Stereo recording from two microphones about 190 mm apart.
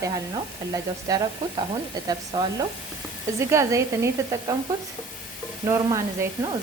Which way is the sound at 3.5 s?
15° right (ahead or behind).